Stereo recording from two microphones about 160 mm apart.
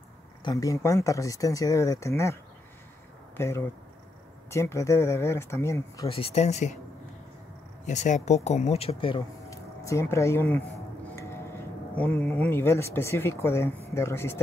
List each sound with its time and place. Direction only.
0.4 s speech: 25° left (ahead or behind)
3.3 s speech: 15° left (ahead or behind)
6.0 s speech: 35° left (ahead or behind)
7.8 s speech: 45° left (ahead or behind)
9.5 s speech: 20° left (ahead or behind)
11.1 s tick-tock: 15° left (ahead or behind)
11.9 s speech: 10° left (ahead or behind)